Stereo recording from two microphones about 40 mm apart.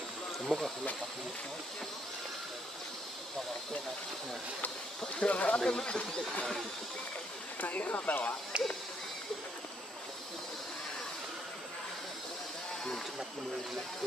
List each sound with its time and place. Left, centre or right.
0.5 s speech: centre
5.2 s speech: left
5.6 s speech: left
7.6 s speech: left